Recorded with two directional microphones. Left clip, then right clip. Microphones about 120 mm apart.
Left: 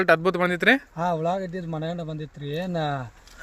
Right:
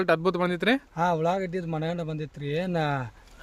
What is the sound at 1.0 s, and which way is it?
A man's voice, 35° right (ahead or behind).